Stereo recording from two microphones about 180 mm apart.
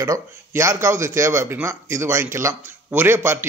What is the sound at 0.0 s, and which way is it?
Speech, 15° right (ahead or behind).